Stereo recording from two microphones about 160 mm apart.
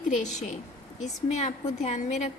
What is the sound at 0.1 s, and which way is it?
A woman's voice, 50° left (ahead or behind).